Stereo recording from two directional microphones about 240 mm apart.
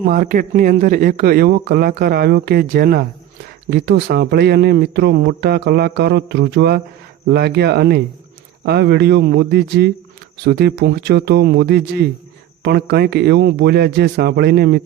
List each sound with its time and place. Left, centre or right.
0.1 s a man's voice: right